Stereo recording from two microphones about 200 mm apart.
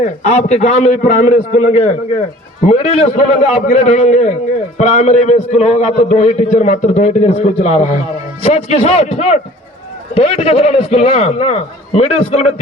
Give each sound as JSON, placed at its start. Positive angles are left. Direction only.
{"t": 0.0, "sound": "a man's voice", "side_deg": 35}